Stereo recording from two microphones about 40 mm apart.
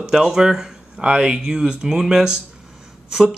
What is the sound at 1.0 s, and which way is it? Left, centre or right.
Speech, right.